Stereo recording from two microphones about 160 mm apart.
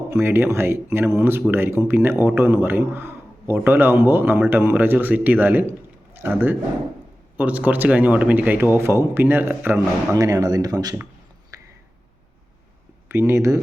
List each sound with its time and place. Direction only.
0.1 s speech: 15° right (ahead or behind)
11.5 s a sound: 20° right (ahead or behind)
13.1 s speech: 15° right (ahead or behind)